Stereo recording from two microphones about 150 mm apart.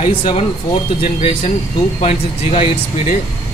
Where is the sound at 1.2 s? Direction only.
40° left (ahead or behind).